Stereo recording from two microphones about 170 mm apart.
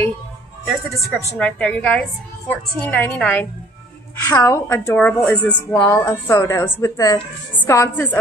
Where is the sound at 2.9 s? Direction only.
10° left (ahead or behind).